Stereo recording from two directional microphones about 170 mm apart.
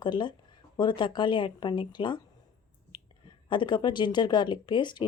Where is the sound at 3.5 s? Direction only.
30° left (ahead or behind).